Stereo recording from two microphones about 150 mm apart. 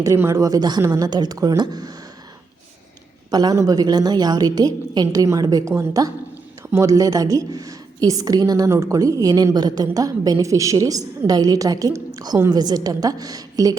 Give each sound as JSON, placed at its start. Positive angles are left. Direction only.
{"t": 0.0, "sound": "a woman's voice", "side_deg": -20}
{"t": 3.2, "sound": "a woman's voice", "side_deg": -25}